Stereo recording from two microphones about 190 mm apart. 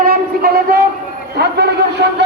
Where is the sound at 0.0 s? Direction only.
50° right (ahead or behind).